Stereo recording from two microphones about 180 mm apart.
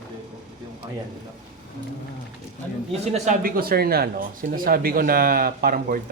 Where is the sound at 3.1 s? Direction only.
40° right (ahead or behind).